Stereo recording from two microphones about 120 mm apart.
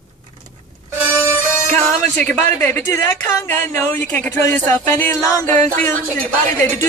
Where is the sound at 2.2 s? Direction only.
15° left (ahead or behind).